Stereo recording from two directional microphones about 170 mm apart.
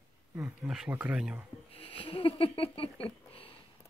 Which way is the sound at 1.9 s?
30° left (ahead or behind).